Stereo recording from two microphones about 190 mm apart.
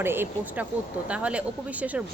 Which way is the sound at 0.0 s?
10° right (ahead or behind).